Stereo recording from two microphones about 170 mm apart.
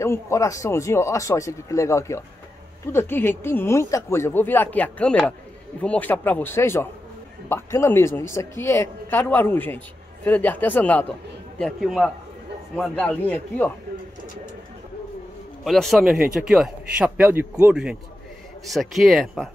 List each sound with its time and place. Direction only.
0.0 s speech: 15° left (ahead or behind)
15.6 s speech: centre (ahead or behind)